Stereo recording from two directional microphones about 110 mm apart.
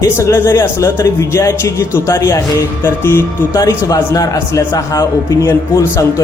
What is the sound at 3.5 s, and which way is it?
A man's voice, 35° left (ahead or behind).